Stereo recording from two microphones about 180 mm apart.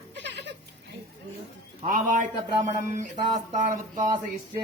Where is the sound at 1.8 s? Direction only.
45° right (ahead or behind).